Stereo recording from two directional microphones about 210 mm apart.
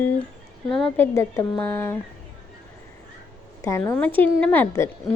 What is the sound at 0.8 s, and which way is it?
A woman's voice, 10° left (ahead or behind).